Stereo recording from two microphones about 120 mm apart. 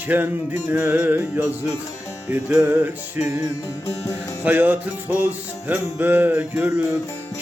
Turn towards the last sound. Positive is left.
turn(degrees=-15)  # may be behind; listen again after turning